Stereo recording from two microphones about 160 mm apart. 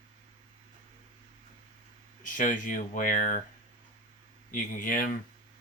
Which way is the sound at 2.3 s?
55° left (ahead or behind).